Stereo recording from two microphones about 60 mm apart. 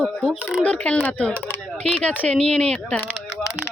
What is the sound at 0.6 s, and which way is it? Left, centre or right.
Speech, left.